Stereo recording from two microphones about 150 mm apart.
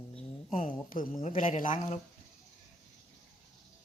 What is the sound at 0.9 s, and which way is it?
Speech, 65° left (ahead or behind).